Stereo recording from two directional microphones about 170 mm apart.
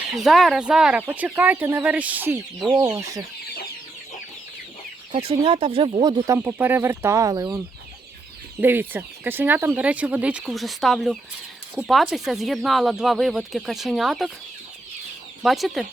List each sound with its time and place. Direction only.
0.2 s speech: centre (ahead or behind); by 3.2 s 20° right (ahead or behind)
5.1 s speech: 35° right (ahead or behind)
8.6 s speech: 10° right (ahead or behind)
15.4 s speech: centre (ahead or behind)